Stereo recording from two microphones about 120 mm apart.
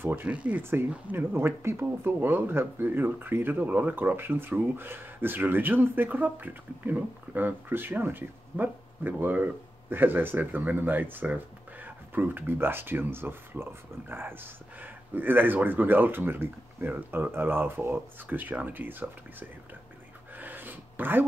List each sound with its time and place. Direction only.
0.0 s speech: 15° right (ahead or behind)
20.3 s dog: 15° right (ahead or behind)